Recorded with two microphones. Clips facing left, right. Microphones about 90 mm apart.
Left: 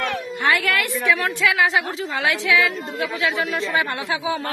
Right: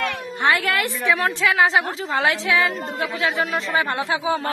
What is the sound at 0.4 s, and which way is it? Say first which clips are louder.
A woman's voice: right 1 dB; 25° right (ahead or behind).